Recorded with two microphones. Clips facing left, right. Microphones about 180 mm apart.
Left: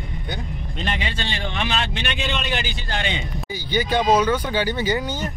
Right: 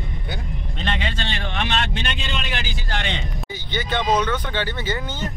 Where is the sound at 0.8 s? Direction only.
10° left (ahead or behind).